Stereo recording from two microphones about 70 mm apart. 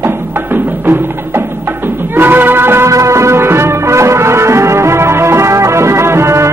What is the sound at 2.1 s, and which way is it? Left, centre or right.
Music, right.